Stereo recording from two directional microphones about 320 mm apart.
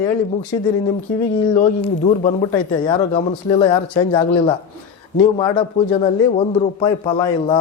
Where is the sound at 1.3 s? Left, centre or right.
Centre.